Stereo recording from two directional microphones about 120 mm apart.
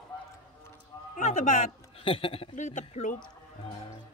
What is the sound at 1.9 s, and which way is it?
Speech, 50° left (ahead or behind).